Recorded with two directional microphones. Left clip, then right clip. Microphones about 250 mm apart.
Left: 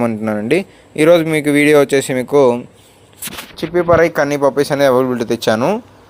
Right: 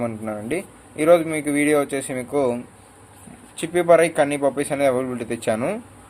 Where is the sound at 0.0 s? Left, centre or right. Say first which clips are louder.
Left 9 dB; left.